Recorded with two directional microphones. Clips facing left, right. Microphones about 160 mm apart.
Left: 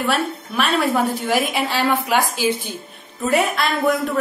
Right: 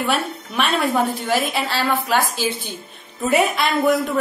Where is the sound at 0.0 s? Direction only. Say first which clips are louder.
Left 1 dB; centre (ahead or behind).